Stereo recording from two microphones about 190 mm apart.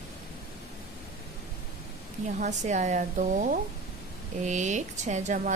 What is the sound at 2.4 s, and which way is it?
A woman's voice, 40° right (ahead or behind).